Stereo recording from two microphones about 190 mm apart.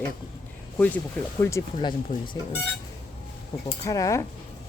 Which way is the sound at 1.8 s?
25° left (ahead or behind).